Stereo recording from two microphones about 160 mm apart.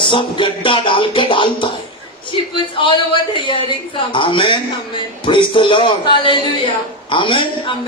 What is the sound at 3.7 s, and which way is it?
Speech, 30° left (ahead or behind).